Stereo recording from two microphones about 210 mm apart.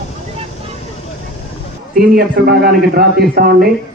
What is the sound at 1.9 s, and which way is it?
A man's voice, 50° right (ahead or behind).